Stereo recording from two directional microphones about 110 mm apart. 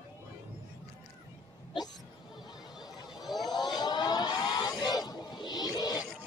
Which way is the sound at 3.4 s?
40° left (ahead or behind).